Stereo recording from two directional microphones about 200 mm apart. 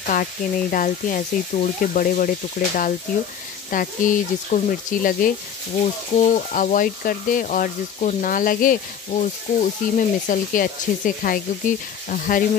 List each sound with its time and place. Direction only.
0.1 s speech: 45° left (ahead or behind)
6.1 s speech: 40° left (ahead or behind)